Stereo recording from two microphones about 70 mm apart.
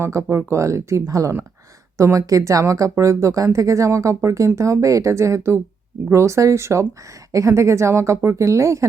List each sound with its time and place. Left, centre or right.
0.0 s speech: right